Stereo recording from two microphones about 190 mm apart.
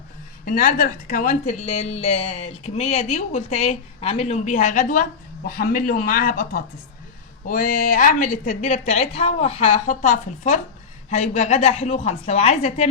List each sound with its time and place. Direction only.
0.4 s a woman's voice: 50° left (ahead or behind)